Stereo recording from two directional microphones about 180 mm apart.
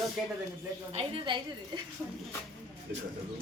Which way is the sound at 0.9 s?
30° right (ahead or behind).